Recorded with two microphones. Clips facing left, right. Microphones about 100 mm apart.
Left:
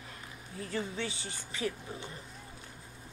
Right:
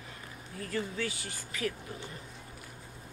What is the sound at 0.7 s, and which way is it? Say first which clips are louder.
Speech: right 2 dB; 25° left (ahead or behind).